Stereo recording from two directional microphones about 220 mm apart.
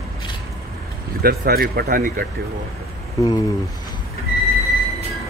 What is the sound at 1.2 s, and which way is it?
Speech, 45° right (ahead or behind).